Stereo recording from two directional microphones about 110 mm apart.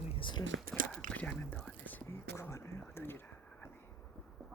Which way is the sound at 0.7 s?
10° left (ahead or behind).